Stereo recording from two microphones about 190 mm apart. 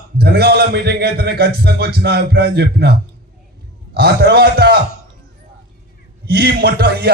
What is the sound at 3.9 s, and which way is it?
Speech, 55° right (ahead or behind).